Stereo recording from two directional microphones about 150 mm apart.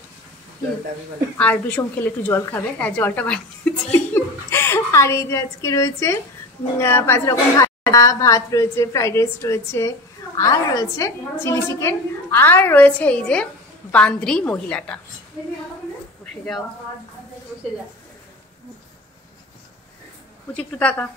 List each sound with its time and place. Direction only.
1.4 s a woman's voice: 10° left (ahead or behind)
20.8 s a woman's voice: 10° left (ahead or behind)